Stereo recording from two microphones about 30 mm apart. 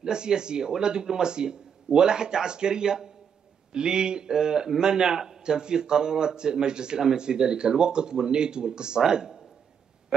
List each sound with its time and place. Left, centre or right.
0.0 s speech: right